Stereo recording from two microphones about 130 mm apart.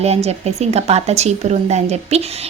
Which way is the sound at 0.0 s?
55° right (ahead or behind).